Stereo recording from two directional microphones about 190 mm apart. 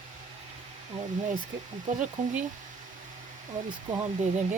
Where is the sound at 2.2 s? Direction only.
40° right (ahead or behind).